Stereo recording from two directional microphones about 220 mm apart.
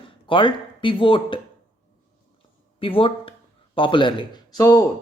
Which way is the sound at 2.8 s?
25° left (ahead or behind).